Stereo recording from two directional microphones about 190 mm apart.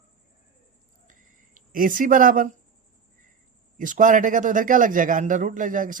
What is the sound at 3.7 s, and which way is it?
A man's voice, 45° right (ahead or behind).